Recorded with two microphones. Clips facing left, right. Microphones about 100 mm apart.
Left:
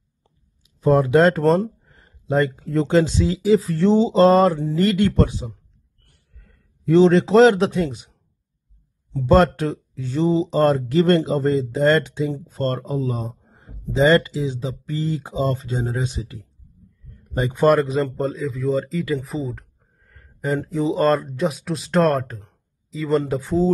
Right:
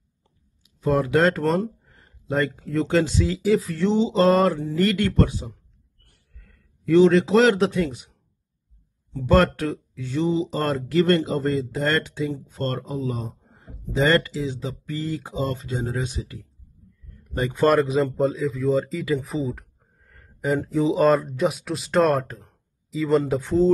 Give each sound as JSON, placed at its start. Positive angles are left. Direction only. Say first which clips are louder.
{"t": 0.7, "sound": "speech", "louder": "left 5 dB", "side_deg": 30}
{"t": 4.1, "sound": "speech", "louder": "left 3 dB", "side_deg": 25}
{"t": 6.9, "sound": "speech", "louder": "left 2 dB", "side_deg": 30}
{"t": 9.1, "sound": "speech", "louder": "left 3 dB", "side_deg": 25}
{"t": 12.4, "sound": "speech", "louder": "left 4 dB", "side_deg": 35}
{"t": 13.9, "sound": "speech", "louder": "left 4 dB", "side_deg": 20}
{"t": 17.3, "sound": "speech", "louder": "left 2 dB", "side_deg": 20}
{"t": 17.6, "sound": "speech", "louder": "left 2 dB", "side_deg": 0}